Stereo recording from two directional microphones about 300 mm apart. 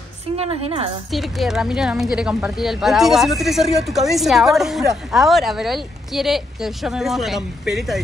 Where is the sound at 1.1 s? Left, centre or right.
Centre.